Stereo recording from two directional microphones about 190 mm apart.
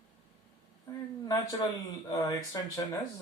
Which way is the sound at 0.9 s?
15° left (ahead or behind).